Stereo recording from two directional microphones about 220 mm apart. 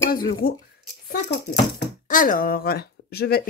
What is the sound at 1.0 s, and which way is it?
Speech, 50° left (ahead or behind).